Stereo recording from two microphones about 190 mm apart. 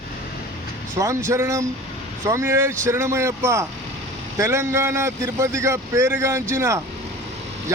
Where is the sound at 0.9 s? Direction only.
15° right (ahead or behind).